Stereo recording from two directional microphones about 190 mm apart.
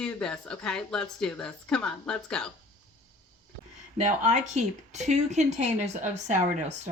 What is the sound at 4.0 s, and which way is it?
A woman's voice, 40° right (ahead or behind).